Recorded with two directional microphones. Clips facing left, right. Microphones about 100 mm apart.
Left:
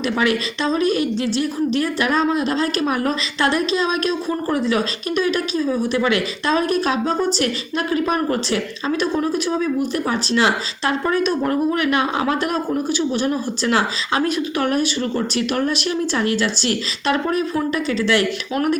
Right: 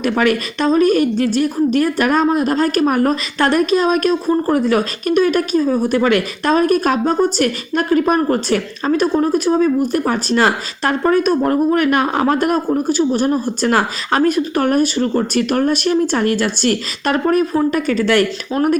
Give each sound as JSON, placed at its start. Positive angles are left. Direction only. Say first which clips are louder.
{"t": 0.0, "sound": "speech", "louder": "right 4 dB", "side_deg": -45}
{"t": 4.3, "sound": "speech", "louder": "right 6 dB", "side_deg": -35}
{"t": 4.6, "sound": "speech", "louder": "right 4 dB", "side_deg": -50}